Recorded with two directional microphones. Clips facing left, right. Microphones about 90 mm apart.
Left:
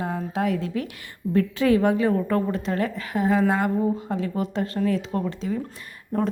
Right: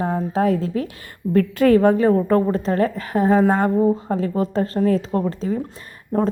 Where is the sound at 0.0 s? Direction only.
35° right (ahead or behind).